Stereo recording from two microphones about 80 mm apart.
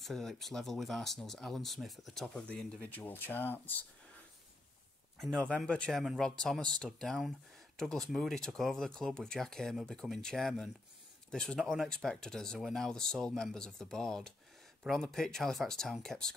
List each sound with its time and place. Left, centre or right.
0.0 s speech: centre
2.2 s speech: centre
5.7 s speech: centre